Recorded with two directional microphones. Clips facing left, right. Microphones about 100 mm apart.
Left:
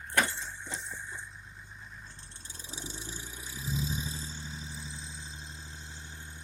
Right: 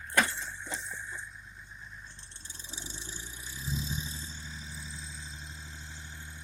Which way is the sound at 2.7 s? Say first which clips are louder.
Left 3 dB; 45° left (ahead or behind).